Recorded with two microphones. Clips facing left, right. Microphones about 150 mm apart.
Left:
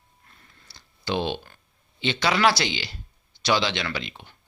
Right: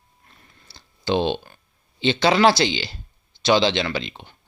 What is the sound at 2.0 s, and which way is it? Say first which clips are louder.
Speech: right 6 dB; 30° right (ahead or behind).